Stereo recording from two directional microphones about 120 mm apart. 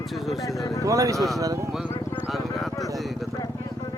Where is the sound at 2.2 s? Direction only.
Centre (ahead or behind).